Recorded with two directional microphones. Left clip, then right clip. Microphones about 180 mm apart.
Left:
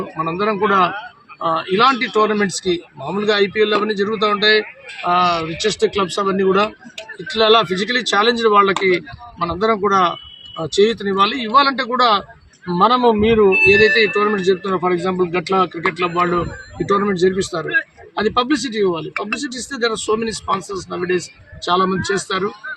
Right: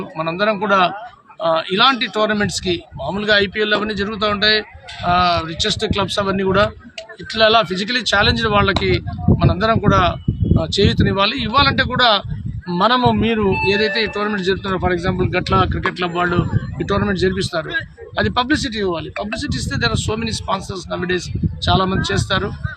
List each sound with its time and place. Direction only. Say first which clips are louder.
0.3 s speech: right 1 dB; 15° right (ahead or behind)